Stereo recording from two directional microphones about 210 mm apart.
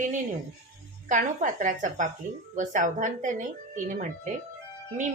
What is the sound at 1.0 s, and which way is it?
A woman's voice, 35° right (ahead or behind).